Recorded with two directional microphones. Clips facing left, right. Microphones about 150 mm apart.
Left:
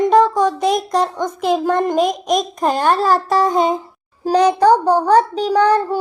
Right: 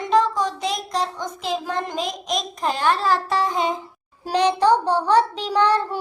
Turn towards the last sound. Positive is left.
turn(degrees=40)  # may be behind; listen again after turning